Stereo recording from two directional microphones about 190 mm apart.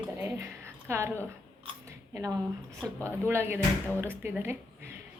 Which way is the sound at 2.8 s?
10° left (ahead or behind).